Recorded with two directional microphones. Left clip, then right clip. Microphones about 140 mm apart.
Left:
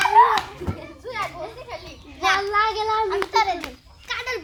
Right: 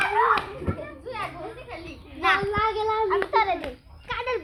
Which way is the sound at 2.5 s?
35° left (ahead or behind).